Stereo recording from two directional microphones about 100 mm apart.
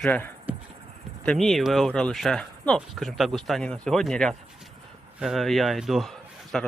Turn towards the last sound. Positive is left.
turn(degrees=0)  # may be behind; listen again after turning